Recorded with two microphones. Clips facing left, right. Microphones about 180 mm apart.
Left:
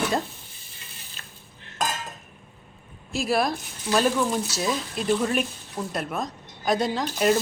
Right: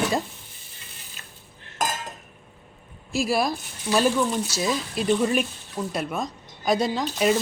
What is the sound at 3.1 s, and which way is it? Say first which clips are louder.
Speech: right 1 dB; 5° right (ahead or behind).